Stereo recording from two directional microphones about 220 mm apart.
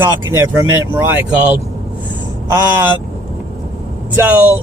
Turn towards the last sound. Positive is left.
turn(degrees=-10)  # may be behind; listen again after turning